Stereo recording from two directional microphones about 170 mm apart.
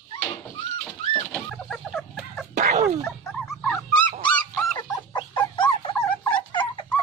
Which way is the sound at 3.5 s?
15° left (ahead or behind).